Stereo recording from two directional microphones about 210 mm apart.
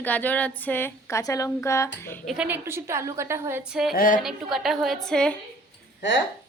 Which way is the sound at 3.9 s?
40° left (ahead or behind).